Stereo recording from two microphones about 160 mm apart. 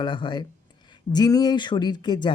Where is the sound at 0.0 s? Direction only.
30° left (ahead or behind).